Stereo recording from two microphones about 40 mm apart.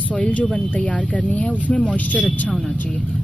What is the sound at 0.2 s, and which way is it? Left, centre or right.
Speech, left.